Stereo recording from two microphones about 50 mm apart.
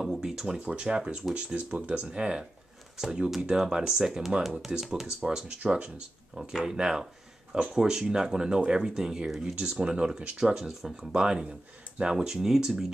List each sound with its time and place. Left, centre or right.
0.0 s a sound: centre
0.6 s speech: right
5.5 s speech: right
6.5 s speech: centre
10.4 s speech: centre